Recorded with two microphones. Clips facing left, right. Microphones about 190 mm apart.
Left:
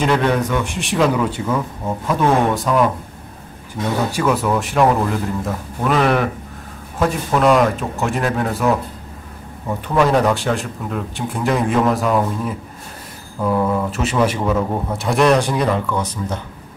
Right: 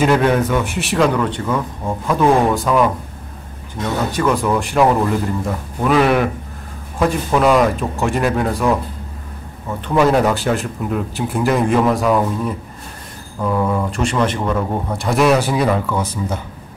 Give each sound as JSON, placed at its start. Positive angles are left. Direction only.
{"t": 0.0, "sound": "speech", "side_deg": -5}
{"t": 4.1, "sound": "speech", "side_deg": 5}
{"t": 9.9, "sound": "speech", "side_deg": -5}